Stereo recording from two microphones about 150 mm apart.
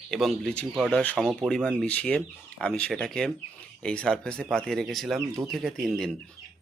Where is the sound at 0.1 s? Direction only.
Centre (ahead or behind).